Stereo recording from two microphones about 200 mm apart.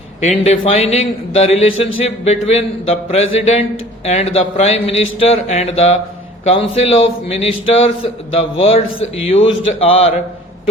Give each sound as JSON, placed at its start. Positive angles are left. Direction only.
{"t": 0.2, "sound": "a man's voice", "side_deg": 35}